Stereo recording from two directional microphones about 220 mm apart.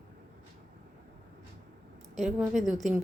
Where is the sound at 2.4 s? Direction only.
Centre (ahead or behind).